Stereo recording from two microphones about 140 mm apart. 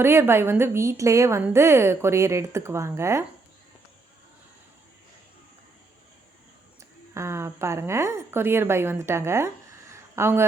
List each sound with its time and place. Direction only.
0.0 s a woman's voice: 15° right (ahead or behind)
7.1 s a woman's voice: 20° right (ahead or behind)